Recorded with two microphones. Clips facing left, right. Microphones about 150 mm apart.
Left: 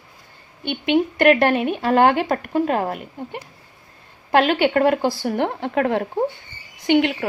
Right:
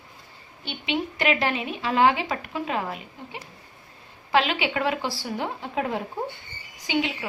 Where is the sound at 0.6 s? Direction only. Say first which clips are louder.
Left 9 dB; 55° left (ahead or behind).